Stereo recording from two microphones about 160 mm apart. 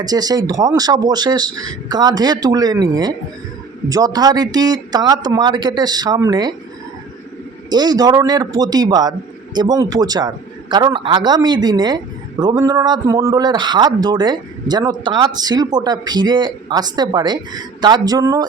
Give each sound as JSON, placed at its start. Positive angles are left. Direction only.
{"t": 0.0, "sound": "a man's voice", "side_deg": -25}
{"t": 7.7, "sound": "a man's voice", "side_deg": -25}